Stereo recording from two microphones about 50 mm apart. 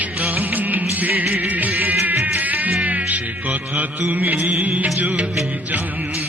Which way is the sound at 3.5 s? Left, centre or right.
Centre.